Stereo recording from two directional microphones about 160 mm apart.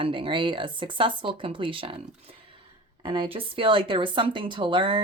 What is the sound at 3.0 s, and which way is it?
Speech, 30° right (ahead or behind).